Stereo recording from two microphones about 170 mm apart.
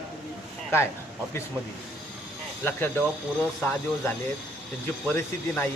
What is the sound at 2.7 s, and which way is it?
Speech, 10° left (ahead or behind).